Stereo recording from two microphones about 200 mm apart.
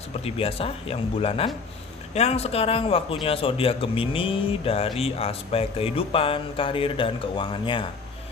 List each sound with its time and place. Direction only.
0.3 s speech: 30° left (ahead or behind)